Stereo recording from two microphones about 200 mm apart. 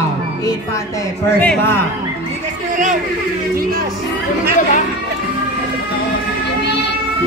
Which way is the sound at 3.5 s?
50° right (ahead or behind).